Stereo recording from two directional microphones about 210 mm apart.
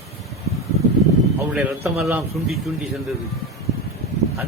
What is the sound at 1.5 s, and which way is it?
A man's voice, 5° right (ahead or behind).